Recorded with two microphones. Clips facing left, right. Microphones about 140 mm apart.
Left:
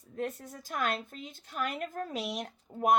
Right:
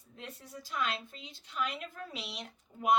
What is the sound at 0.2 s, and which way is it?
A woman's voice, 50° left (ahead or behind).